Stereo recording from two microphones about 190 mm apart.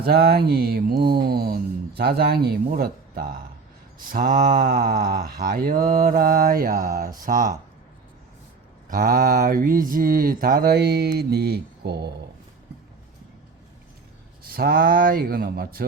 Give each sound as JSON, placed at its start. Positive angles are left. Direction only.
{"t": 0.0, "sound": "speech", "side_deg": -55}
{"t": 4.1, "sound": "mantra", "side_deg": -50}
{"t": 8.9, "sound": "mantra", "side_deg": -50}
{"t": 14.4, "sound": "mantra", "side_deg": -50}